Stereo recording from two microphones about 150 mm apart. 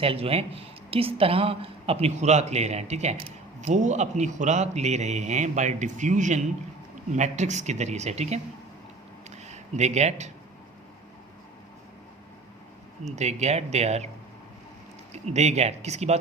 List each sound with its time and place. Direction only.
0.0 s a woman's voice: 40° right (ahead or behind)
9.3 s a sound: 50° right (ahead or behind)
13.1 s a man's voice: 50° right (ahead or behind)
15.1 s a man's voice: 50° right (ahead or behind)